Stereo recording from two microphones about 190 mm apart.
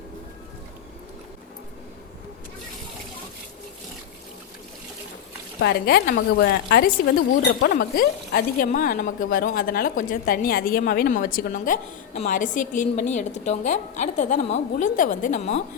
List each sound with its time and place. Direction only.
5.5 s a woman's voice: 55° left (ahead or behind); by 15.6 s 35° left (ahead or behind)